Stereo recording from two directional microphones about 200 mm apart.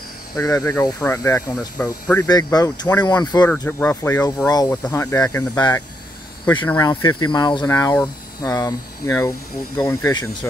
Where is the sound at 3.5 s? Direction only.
10° left (ahead or behind).